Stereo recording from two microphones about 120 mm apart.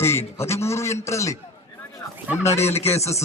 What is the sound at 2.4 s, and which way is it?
Speech, 20° left (ahead or behind).